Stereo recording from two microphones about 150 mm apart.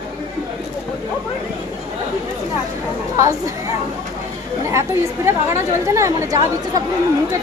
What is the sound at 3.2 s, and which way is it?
Speech, 20° right (ahead or behind).